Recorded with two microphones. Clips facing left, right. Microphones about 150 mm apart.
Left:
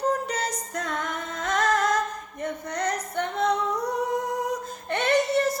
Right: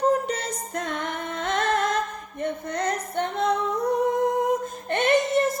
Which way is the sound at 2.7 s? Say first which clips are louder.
Left 1 dB; 25° right (ahead or behind).